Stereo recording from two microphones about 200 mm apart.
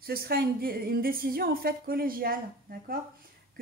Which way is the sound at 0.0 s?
50° right (ahead or behind).